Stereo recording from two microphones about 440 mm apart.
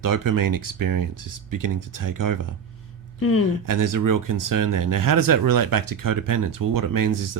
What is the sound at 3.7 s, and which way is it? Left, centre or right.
Speech, right.